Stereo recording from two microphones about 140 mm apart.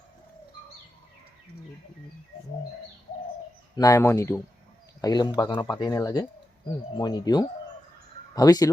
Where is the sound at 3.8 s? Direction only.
20° left (ahead or behind).